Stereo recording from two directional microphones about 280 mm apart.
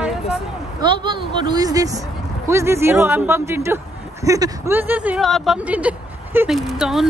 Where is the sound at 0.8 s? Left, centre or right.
Centre.